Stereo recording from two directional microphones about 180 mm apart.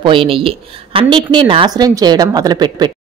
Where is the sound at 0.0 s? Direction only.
30° right (ahead or behind).